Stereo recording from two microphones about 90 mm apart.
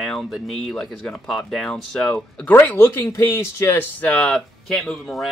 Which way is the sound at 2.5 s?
25° left (ahead or behind).